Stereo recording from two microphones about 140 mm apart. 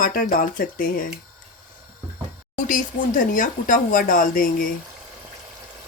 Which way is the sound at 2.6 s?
70° left (ahead or behind).